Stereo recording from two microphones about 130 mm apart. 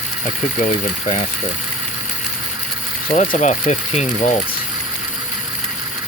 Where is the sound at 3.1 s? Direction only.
70° left (ahead or behind).